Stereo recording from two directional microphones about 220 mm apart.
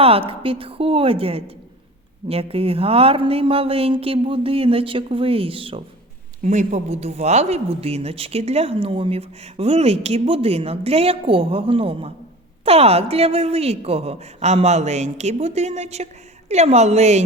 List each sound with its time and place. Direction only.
0.0 s a woman's voice: 25° right (ahead or behind)